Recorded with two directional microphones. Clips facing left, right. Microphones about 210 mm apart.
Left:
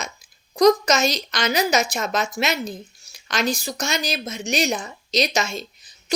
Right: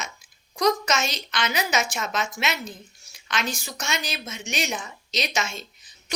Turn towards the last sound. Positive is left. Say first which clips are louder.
# left 5 dB
turn(degrees=35)  # may be behind; listen again after turning